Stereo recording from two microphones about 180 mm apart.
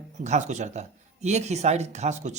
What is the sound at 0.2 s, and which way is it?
Speech, 40° right (ahead or behind).